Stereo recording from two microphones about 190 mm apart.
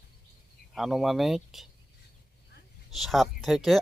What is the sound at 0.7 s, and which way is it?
Speech, centre (ahead or behind).